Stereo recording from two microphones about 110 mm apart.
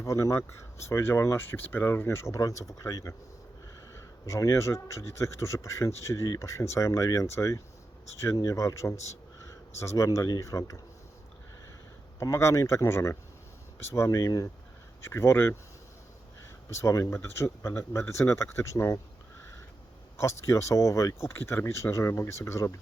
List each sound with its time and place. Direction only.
0.0 s speech: 30° left (ahead or behind)
9.0 s a sound: 30° left (ahead or behind)
9.8 s speech: 30° left (ahead or behind)
12.2 s speech: 25° left (ahead or behind)
16.6 s speech: 25° left (ahead or behind)
20.1 s speech: 25° left (ahead or behind)